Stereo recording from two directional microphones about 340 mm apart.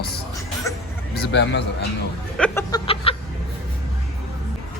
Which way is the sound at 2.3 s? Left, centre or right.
Centre.